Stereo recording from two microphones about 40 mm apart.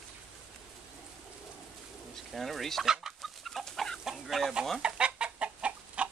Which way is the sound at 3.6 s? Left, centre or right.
Centre.